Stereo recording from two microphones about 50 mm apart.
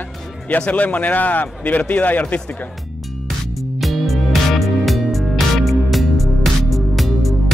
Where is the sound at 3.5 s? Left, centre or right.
Centre.